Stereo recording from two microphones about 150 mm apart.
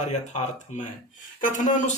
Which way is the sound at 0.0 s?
50° left (ahead or behind).